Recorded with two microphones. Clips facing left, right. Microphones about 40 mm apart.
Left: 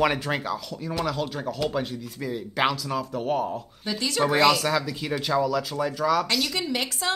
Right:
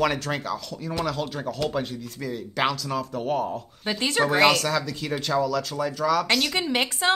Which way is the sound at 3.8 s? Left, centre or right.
Right.